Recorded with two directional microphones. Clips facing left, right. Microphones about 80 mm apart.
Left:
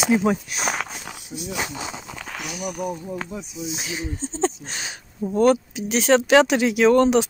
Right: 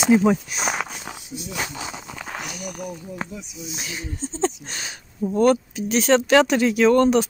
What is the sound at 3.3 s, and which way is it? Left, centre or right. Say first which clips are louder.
Speech: left 3 dB; left.